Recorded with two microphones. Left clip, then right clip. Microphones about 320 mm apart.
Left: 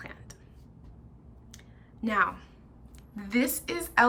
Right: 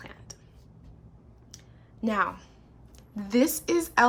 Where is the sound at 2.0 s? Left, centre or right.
Centre.